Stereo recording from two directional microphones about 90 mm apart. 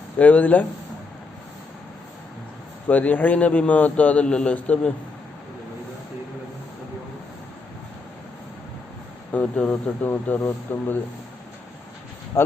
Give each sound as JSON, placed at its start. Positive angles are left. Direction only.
{"t": 0.2, "sound": "a man's voice", "side_deg": 15}
{"t": 2.8, "sound": "a man's voice", "side_deg": 20}
{"t": 9.3, "sound": "speech", "side_deg": 15}